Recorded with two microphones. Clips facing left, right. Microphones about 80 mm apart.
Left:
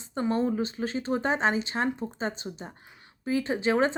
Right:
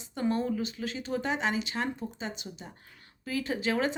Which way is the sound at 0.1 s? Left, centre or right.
Left.